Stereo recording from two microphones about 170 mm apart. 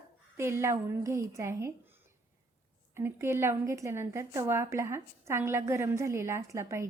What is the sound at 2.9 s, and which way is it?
A woman's voice, 15° right (ahead or behind).